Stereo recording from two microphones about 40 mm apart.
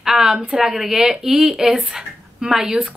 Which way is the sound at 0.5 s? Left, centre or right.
Centre.